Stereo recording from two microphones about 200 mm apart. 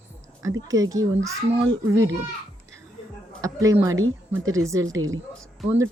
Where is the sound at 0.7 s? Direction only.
20° right (ahead or behind).